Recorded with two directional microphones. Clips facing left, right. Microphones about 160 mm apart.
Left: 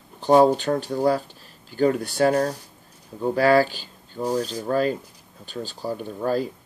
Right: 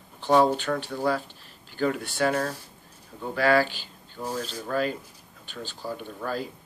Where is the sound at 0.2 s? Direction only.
40° left (ahead or behind).